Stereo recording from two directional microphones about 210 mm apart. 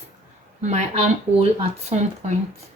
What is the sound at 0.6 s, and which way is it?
Speech, 35° right (ahead or behind).